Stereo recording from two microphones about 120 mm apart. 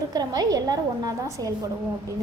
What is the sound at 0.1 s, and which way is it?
A woman's voice, 30° right (ahead or behind).